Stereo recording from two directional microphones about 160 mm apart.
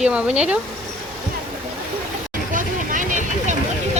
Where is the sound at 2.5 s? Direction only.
55° right (ahead or behind).